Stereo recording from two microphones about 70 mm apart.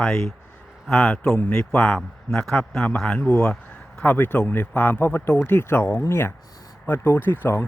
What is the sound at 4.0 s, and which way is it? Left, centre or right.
Speech, left.